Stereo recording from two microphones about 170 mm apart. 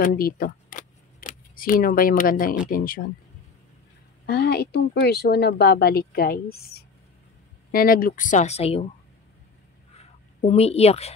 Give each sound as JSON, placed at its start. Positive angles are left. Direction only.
{"t": 0.0, "sound": "camera", "side_deg": 60}
{"t": 2.7, "sound": "speech", "side_deg": 55}
{"t": 4.3, "sound": "speech", "side_deg": 70}
{"t": 9.9, "sound": "a sound", "side_deg": 40}